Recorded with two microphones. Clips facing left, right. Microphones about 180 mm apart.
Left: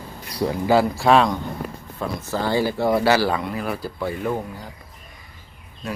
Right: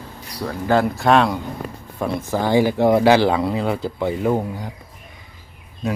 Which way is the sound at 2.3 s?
15° right (ahead or behind).